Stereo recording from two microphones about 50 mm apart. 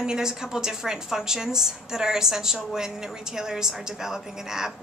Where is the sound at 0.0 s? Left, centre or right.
Centre.